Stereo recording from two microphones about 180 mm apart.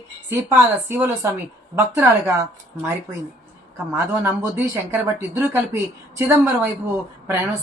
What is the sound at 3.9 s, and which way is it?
Speech, 15° right (ahead or behind).